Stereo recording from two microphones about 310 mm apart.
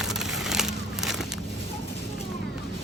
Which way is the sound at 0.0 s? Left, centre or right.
Centre.